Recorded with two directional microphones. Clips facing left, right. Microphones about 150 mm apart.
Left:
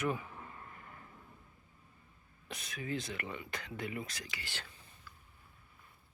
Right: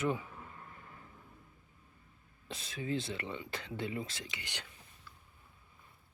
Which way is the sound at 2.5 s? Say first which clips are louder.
Right 3 dB; 30° right (ahead or behind).